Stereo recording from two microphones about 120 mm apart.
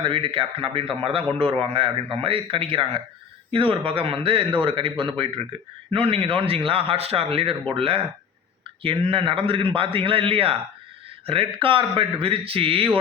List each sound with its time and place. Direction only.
0.0 s a man's voice: 45° right (ahead or behind)